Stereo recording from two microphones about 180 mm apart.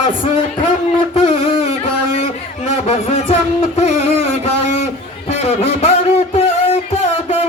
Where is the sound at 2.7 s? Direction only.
35° left (ahead or behind).